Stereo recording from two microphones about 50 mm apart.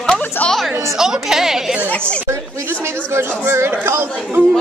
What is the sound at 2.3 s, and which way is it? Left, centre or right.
Chatter, right.